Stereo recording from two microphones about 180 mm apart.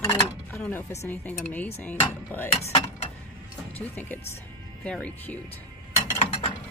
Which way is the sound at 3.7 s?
10° left (ahead or behind).